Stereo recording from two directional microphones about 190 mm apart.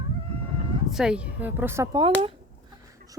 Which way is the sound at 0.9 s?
5° right (ahead or behind).